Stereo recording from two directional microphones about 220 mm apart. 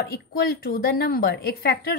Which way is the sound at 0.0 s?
45° left (ahead or behind).